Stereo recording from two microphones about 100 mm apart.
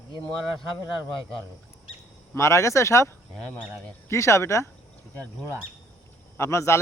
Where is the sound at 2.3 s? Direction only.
30° left (ahead or behind).